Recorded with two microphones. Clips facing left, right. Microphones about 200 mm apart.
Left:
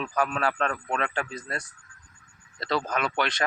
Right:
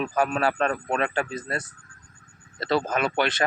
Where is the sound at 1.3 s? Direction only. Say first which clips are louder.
Right 4 dB; 5° right (ahead or behind).